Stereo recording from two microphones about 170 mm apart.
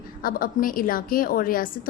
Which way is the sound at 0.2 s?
55° left (ahead or behind).